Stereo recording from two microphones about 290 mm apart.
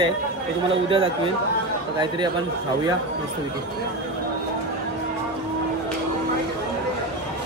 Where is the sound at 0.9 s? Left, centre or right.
Centre.